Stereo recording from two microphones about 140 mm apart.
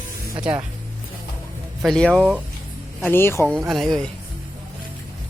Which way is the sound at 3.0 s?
15° left (ahead or behind).